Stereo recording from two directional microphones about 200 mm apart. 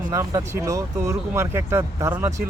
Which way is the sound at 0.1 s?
15° right (ahead or behind).